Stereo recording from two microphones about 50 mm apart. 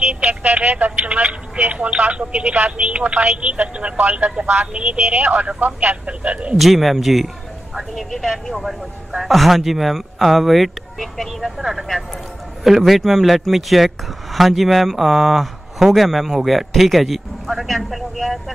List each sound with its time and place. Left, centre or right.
0.1 s speech: right
6.5 s speech: centre